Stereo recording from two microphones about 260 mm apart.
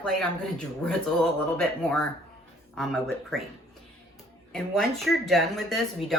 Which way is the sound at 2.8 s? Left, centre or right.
Centre.